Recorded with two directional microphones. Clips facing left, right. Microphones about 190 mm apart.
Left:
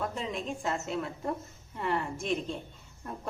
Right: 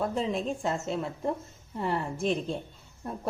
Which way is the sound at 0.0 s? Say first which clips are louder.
Right 5 dB; 30° right (ahead or behind).